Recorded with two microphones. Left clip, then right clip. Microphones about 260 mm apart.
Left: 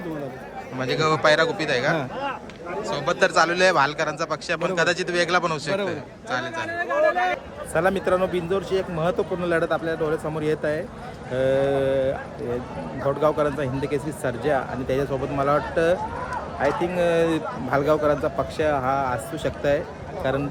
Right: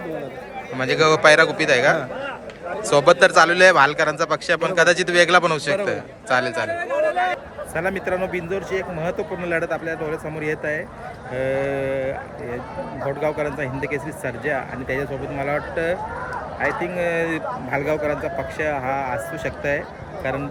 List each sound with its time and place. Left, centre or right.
0.8 s a man's voice: centre
6.8 s a sound: left
7.7 s speech: centre
13.1 s speech: centre